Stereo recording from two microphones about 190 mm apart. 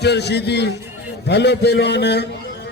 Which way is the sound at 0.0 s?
60° left (ahead or behind).